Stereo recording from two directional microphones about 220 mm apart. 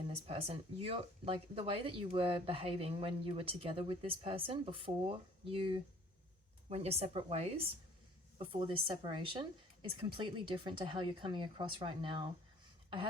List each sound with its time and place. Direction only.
0.3 s speech: 25° right (ahead or behind)